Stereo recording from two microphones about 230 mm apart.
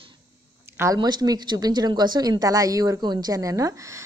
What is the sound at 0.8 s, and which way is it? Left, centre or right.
Speech, centre.